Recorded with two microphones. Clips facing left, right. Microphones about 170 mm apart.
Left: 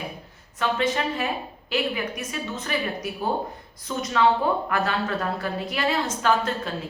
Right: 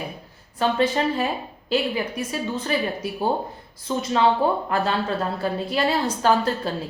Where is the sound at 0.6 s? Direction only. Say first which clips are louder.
Right 3 dB; 30° right (ahead or behind).